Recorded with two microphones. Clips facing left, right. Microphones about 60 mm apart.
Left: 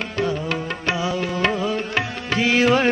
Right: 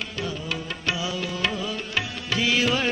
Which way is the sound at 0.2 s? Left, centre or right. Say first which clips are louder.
Left 9 dB; left.